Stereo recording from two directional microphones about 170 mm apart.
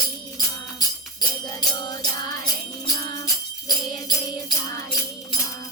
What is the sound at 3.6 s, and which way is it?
Jingle bell, 25° left (ahead or behind).